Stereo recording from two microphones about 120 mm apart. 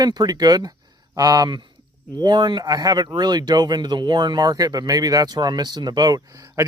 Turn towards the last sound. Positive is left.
turn(degrees=-30)  # may be behind; listen again after turning